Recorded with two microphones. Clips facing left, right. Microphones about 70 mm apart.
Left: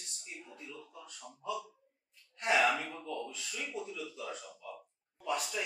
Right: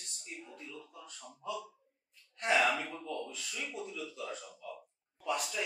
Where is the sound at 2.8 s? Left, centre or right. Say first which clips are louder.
Even; centre.